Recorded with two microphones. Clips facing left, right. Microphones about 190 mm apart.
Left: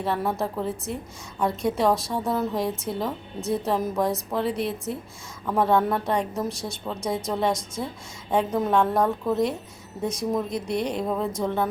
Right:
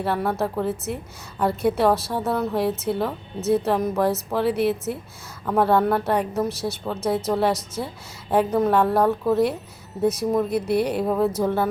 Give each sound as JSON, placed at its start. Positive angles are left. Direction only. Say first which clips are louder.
{"t": 0.0, "sound": "a woman's voice", "louder": "right 2 dB", "side_deg": 0}